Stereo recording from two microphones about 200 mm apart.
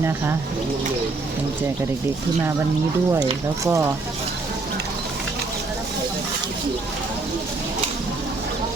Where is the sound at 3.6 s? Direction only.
15° right (ahead or behind).